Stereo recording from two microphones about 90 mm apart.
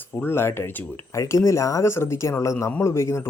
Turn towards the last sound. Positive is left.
turn(degrees=30)  # may be behind; listen again after turning